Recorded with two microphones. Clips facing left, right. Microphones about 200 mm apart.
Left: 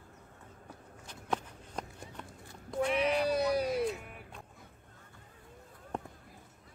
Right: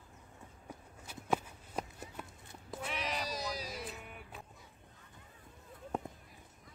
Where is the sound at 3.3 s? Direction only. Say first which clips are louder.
Left 12 dB; 60° left (ahead or behind).